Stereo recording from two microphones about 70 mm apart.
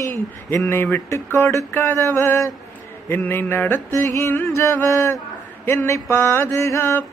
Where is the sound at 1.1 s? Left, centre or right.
Left.